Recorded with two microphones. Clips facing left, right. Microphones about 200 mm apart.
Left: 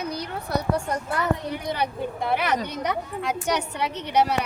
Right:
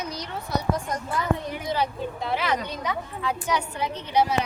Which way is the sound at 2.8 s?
70° left (ahead or behind).